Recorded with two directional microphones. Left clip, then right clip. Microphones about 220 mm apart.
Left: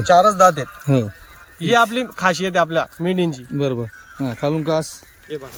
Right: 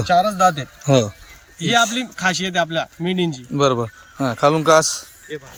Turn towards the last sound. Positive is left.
turn(degrees=0)  # may be behind; listen again after turning